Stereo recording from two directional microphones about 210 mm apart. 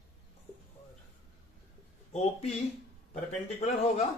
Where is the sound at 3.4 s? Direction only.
30° left (ahead or behind).